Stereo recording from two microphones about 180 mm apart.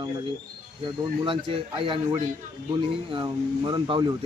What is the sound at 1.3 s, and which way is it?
A man's voice, 30° right (ahead or behind).